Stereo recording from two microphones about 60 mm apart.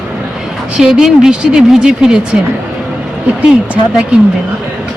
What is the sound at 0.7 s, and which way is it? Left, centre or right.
A woman's voice, centre.